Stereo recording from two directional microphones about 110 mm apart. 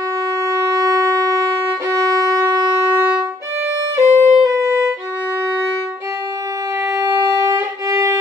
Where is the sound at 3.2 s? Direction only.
25° right (ahead or behind).